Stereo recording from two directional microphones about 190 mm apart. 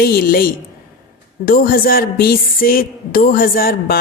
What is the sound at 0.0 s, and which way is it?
Speech, 55° left (ahead or behind).